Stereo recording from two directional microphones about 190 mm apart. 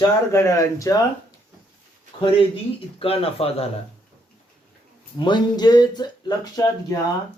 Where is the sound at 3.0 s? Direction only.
30° left (ahead or behind).